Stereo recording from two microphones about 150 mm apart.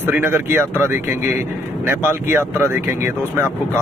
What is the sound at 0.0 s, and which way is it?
Speech, 15° right (ahead or behind).